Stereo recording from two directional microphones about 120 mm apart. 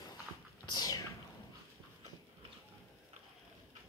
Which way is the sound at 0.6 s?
35° left (ahead or behind).